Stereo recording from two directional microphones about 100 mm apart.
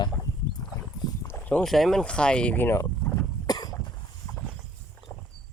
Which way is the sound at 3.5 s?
40° left (ahead or behind).